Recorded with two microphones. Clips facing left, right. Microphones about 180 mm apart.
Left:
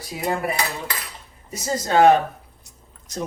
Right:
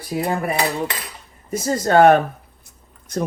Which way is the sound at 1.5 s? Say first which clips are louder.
Right 5 dB; 55° right (ahead or behind).